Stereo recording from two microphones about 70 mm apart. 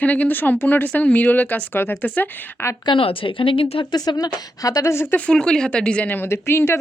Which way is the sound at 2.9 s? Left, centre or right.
Left.